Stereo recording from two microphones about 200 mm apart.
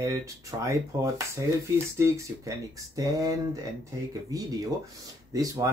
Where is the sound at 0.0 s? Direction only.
15° right (ahead or behind).